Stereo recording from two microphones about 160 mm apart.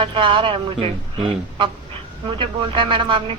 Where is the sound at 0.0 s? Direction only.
30° right (ahead or behind).